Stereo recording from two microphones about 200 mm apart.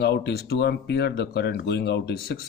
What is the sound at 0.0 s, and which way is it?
Speech, 55° left (ahead or behind).